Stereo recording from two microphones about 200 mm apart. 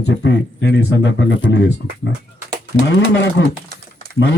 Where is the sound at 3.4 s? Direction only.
65° left (ahead or behind).